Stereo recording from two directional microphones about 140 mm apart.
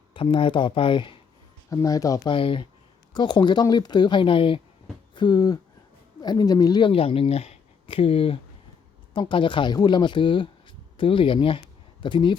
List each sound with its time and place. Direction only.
0.1 s speech: 40° left (ahead or behind)
1.7 s speech: 25° left (ahead or behind)
2.3 s speech: 40° left (ahead or behind)